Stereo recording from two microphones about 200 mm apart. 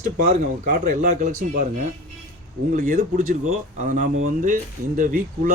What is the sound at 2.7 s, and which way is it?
Speech, 45° right (ahead or behind).